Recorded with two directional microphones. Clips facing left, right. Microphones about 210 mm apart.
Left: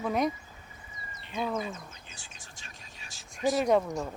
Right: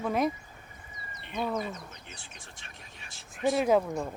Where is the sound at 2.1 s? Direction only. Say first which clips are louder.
Right 3 dB; 60° right (ahead or behind).